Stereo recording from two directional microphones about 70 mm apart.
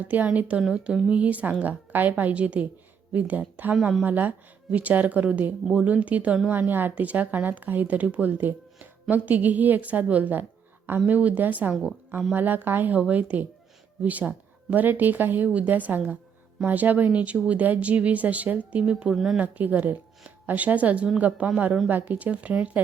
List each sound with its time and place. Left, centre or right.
0.3 s a woman's voice: centre
19.1 s speech: centre
19.4 s speech: right